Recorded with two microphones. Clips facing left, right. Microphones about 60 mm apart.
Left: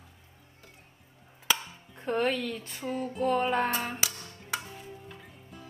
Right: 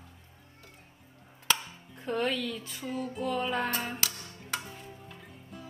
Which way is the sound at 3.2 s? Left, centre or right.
Left.